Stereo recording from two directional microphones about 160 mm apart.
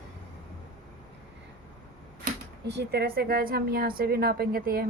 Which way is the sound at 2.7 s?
90° right.